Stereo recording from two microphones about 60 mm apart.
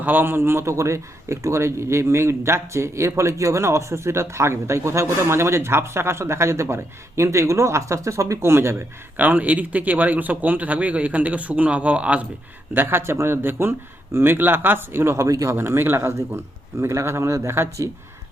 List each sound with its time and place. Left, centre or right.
0.0 s a man's voice: right
8.4 s a man's voice: right
9.1 s a man's voice: right
12.7 s speech: right
15.3 s speech: right
15.5 s a man's voice: right